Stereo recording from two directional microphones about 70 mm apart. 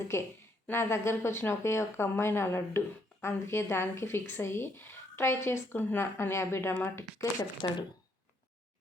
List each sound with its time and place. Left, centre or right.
0.1 s speech: left
7.6 s speech: left